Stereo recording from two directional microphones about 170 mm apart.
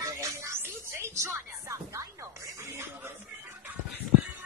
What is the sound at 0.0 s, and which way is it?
Music, 15° right (ahead or behind).